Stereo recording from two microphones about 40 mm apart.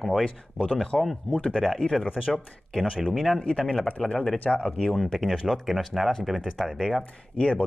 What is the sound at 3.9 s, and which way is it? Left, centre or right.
Speech, left.